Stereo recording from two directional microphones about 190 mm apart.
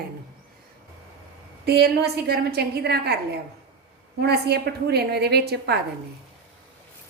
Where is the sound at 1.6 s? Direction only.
60° right (ahead or behind).